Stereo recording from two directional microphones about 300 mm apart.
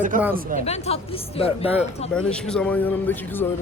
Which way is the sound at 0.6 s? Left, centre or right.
Left.